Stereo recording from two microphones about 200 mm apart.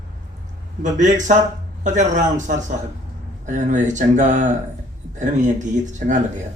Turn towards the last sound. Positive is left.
turn(degrees=-40)  # may be behind; listen again after turning